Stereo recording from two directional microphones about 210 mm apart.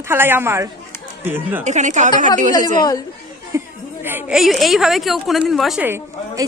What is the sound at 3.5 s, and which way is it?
A woman's voice, 10° right (ahead or behind).